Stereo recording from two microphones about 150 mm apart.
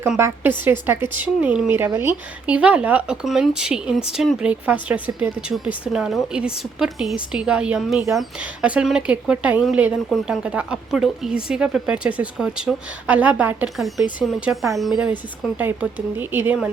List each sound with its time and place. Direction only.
0.2 s speech: 15° right (ahead or behind)